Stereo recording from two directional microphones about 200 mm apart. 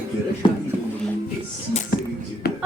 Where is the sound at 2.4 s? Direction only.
50° left (ahead or behind).